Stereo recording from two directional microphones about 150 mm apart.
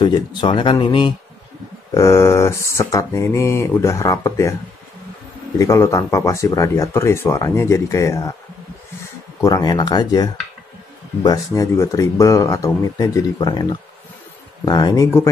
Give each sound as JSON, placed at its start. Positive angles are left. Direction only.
{"t": 0.0, "sound": "speech", "side_deg": 30}
{"t": 2.0, "sound": "speech", "side_deg": 20}
{"t": 5.6, "sound": "speech", "side_deg": 20}
{"t": 9.4, "sound": "speech", "side_deg": 25}